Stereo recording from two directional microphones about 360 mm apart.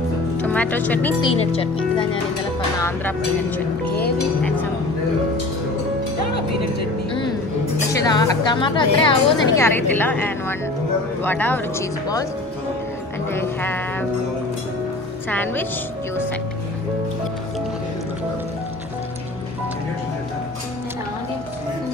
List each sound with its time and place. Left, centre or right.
0.4 s speech: centre
1.3 s speech: centre
2.8 s speech: centre
7.9 s speech: centre
13.3 s speech: centre
15.2 s speech: centre